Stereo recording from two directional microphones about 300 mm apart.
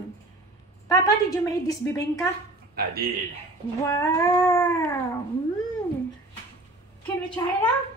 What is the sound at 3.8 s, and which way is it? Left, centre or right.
A woman's voice, centre.